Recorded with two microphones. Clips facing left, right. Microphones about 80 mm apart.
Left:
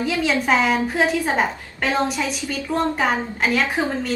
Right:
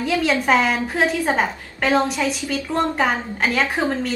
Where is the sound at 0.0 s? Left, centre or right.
Centre.